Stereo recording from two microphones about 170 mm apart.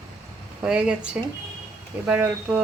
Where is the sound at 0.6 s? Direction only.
5° right (ahead or behind).